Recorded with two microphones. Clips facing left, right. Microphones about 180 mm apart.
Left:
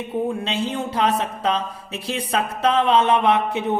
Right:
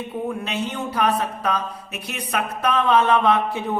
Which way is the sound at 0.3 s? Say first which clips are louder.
Left 2 dB; 30° left (ahead or behind).